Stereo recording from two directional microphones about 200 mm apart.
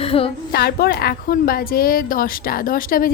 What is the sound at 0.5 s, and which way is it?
A woman's voice, 50° left (ahead or behind).